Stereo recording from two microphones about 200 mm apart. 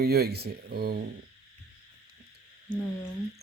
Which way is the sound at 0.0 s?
50° right (ahead or behind).